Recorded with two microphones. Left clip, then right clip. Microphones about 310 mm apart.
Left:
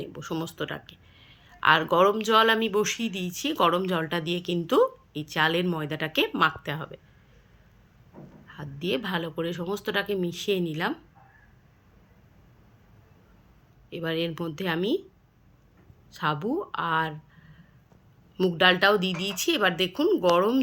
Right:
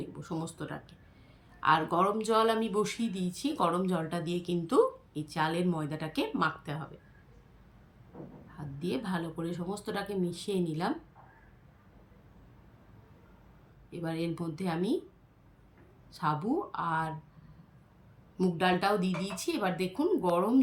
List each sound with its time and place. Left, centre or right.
0.4 s speech: centre
8.8 s speech: centre
13.9 s speech: centre
16.1 s speech: centre
18.4 s speech: centre
20.0 s speech: centre